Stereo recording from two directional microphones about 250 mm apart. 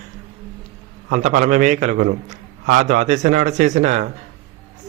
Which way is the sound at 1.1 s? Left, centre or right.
Right.